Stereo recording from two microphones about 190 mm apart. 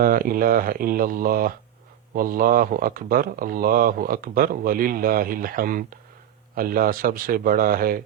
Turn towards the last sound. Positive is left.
turn(degrees=-50)  # may be behind; listen again after turning